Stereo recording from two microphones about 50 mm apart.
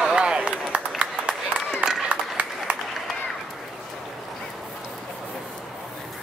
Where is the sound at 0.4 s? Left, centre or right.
Right.